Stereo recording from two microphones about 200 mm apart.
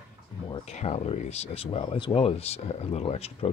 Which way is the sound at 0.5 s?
35° left (ahead or behind).